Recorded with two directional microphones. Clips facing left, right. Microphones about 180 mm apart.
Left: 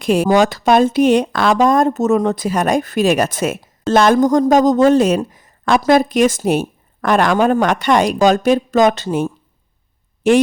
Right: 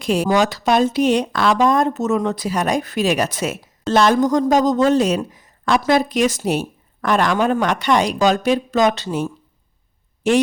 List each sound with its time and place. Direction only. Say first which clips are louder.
0.0 s a woman's voice: left 4 dB; 55° left (ahead or behind)